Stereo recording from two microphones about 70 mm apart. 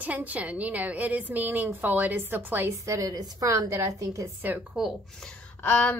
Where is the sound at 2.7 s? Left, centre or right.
Right.